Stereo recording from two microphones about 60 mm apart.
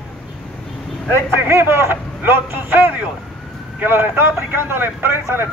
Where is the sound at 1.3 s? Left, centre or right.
Right.